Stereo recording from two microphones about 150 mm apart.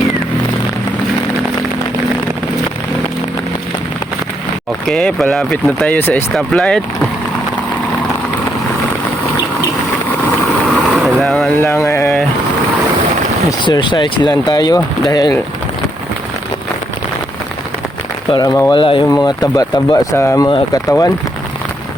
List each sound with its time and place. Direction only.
4.9 s speech: 5° left (ahead or behind)
10.8 s vehicle: centre (ahead or behind)
11.6 s mantra: 15° left (ahead or behind)
13.7 s speech: 30° left (ahead or behind)
18.3 s speech: 25° left (ahead or behind)
18.7 s speech: 35° left (ahead or behind)